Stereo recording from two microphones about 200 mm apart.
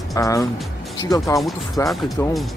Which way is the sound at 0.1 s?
15° left (ahead or behind).